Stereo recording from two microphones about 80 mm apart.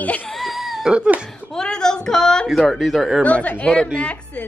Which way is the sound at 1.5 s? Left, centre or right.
Centre.